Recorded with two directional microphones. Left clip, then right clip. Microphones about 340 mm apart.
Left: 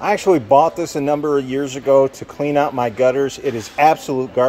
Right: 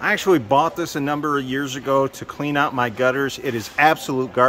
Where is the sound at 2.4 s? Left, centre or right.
Right.